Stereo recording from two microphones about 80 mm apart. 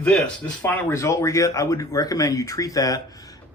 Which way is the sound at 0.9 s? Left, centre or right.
Left.